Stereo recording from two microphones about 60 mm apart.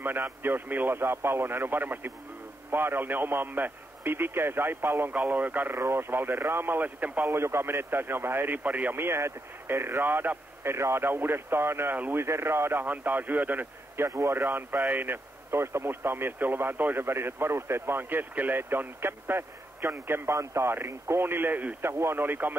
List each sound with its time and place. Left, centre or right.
0.0 s a man's voice: right
5.8 s speech: right
7.2 s speech: right
8.6 s a man's voice: right
8.9 s speech: right
12.8 s a man's voice: right
13.9 s speech: right
21.8 s speech: right